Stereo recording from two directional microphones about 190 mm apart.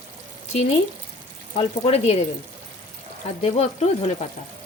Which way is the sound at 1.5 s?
35° left (ahead or behind).